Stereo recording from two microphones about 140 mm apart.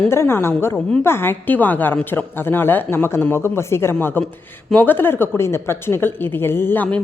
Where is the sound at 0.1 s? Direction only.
15° left (ahead or behind).